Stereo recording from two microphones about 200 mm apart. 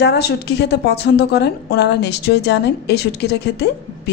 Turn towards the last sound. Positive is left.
turn(degrees=55)  # may be behind; listen again after turning